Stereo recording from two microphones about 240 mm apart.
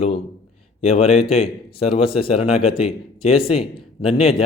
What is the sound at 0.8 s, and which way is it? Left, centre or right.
A man's voice, left.